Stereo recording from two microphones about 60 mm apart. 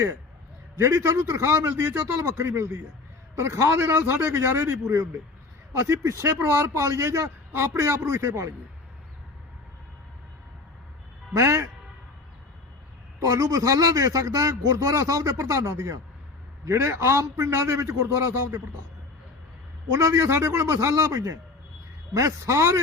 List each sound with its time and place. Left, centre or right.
0.8 s a man's voice: right
5.7 s a man's voice: right
11.3 s a man's voice: right
13.1 s a man's voice: right
16.6 s a man's voice: right
19.9 s a man's voice: right